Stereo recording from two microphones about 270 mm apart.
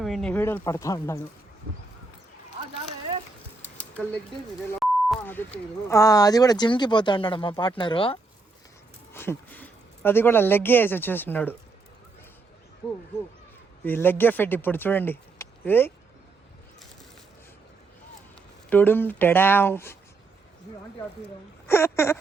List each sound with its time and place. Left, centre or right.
0.0 s speech: centre
4.8 s speech: centre
9.1 s speech: centre
13.8 s speech: centre
18.7 s speech: centre
21.7 s speech: centre